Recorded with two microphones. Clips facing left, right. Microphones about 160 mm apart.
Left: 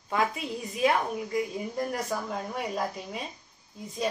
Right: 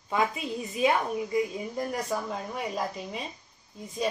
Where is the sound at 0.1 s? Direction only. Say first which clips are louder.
Right 1 dB; centre (ahead or behind).